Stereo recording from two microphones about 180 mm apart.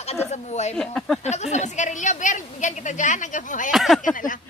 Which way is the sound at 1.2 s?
40° left (ahead or behind).